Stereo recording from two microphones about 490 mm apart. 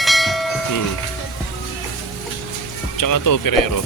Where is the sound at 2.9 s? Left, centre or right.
Left.